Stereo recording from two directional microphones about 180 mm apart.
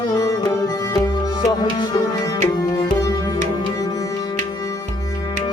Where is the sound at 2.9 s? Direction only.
20° left (ahead or behind).